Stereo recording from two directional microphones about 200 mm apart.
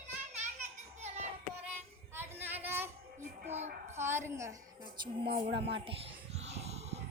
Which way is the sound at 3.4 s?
35° right (ahead or behind).